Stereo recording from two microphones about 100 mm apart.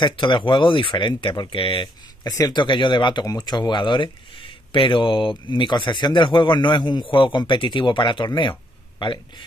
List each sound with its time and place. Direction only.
0.0 s speech: 55° left (ahead or behind)
2.2 s a man's voice: 40° left (ahead or behind)